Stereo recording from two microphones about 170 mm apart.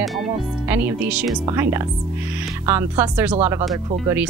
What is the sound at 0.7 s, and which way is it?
A woman's voice, 10° right (ahead or behind).